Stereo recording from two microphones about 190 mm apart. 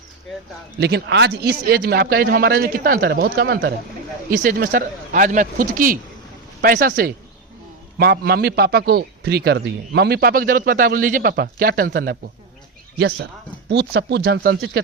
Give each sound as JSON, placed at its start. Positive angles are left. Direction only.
{"t": 0.8, "sound": "a man's voice", "side_deg": -60}